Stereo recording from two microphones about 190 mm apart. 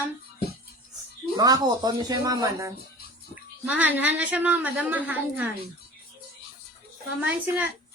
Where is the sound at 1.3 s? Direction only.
20° right (ahead or behind).